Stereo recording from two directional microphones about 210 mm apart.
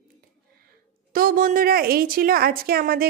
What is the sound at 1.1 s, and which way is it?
A woman's voice, 40° right (ahead or behind).